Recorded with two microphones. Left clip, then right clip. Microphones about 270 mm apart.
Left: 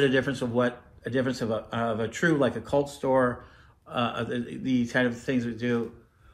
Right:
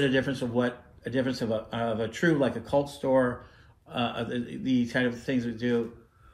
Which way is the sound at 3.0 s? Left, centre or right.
Left.